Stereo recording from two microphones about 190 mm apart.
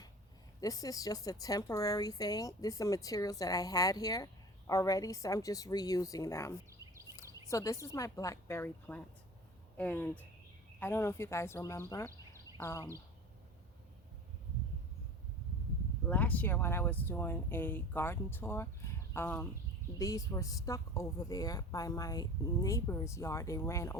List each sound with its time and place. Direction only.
0.6 s a woman's voice: 20° left (ahead or behind)
16.0 s speech: 10° left (ahead or behind)